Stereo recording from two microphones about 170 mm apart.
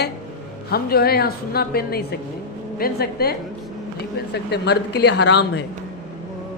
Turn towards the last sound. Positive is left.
turn(degrees=85)